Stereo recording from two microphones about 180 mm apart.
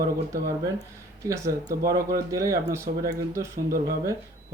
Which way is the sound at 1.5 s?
55° right (ahead or behind).